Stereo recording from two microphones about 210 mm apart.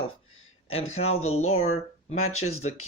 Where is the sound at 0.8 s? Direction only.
75° left (ahead or behind).